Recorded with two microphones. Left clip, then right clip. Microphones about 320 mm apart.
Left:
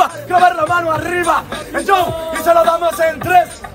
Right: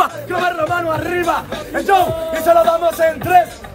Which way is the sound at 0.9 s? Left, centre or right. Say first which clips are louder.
Left 2 dB; centre.